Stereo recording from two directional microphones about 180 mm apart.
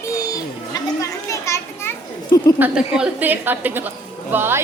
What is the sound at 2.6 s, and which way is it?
A woman's voice, 5° right (ahead or behind).